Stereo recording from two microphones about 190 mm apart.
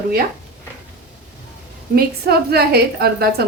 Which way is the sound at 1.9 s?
55° right (ahead or behind).